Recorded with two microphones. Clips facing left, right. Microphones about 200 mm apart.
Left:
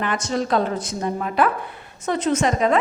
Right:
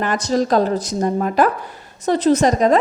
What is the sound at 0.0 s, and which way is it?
A woman's voice, 40° right (ahead or behind).